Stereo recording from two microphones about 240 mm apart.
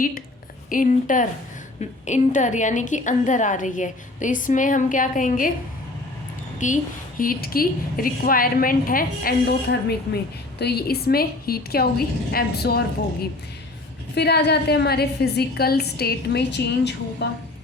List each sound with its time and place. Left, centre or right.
0.7 s a woman's voice: left
6.6 s a woman's voice: left
14.2 s a woman's voice: left